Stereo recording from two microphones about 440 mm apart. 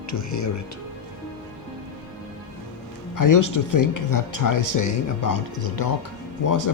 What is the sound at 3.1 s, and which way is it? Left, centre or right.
Speech, left.